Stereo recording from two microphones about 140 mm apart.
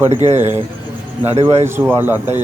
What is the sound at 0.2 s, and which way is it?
Speech, 55° right (ahead or behind).